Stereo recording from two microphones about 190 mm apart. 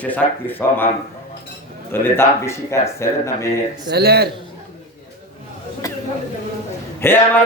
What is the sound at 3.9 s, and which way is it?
Speech, 55° right (ahead or behind).